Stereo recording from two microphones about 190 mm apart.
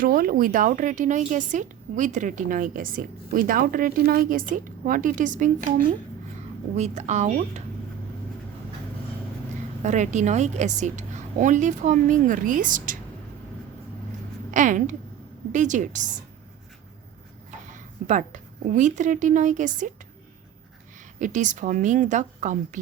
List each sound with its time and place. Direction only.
0.0 s a woman's voice: 50° right (ahead or behind)
6.7 s a woman's voice: 35° right (ahead or behind)
9.8 s a woman's voice: 40° right (ahead or behind)
14.5 s a woman's voice: 40° right (ahead or behind)
17.7 s a woman's voice: 40° right (ahead or behind)
21.2 s a woman's voice: 40° right (ahead or behind)